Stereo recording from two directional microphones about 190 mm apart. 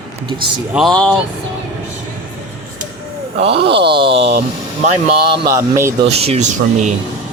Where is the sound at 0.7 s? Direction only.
Centre (ahead or behind).